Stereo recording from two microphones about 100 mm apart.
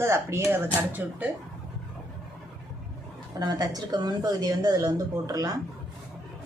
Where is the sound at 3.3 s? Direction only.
40° right (ahead or behind).